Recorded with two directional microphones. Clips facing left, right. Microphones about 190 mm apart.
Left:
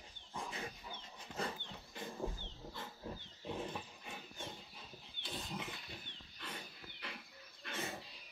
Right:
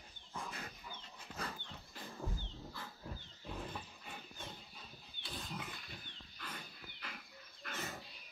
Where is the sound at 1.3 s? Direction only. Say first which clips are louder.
Left 4 dB; 25° left (ahead or behind).